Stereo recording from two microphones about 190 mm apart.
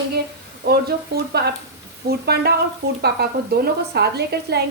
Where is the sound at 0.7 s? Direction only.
55° right (ahead or behind).